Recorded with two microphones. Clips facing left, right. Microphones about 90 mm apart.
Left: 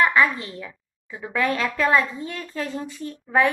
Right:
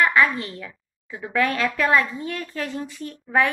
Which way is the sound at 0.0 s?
25° left (ahead or behind).